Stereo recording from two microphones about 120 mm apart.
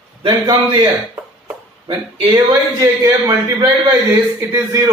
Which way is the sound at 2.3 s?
20° right (ahead or behind).